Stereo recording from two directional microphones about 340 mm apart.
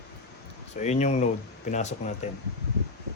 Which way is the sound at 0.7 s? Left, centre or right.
Centre.